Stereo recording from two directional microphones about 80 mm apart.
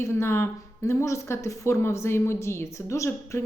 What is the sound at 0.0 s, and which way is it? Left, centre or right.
Speech, left.